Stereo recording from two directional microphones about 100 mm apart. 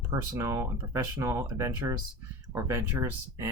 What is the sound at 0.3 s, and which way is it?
Speech, 30° right (ahead or behind).